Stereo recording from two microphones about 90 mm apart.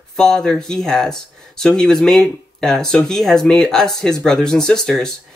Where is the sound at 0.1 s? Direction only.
5° left (ahead or behind).